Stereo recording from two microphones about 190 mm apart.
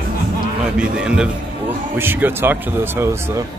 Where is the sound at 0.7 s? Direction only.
5° right (ahead or behind).